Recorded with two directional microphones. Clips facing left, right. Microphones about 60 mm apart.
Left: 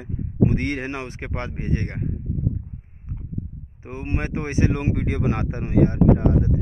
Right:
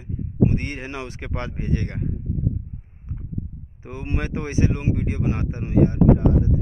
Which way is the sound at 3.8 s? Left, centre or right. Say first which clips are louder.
Left 1 dB; left.